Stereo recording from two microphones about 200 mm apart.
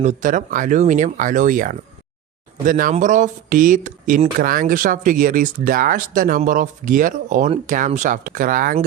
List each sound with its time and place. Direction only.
0.0 s speech: 40° right (ahead or behind)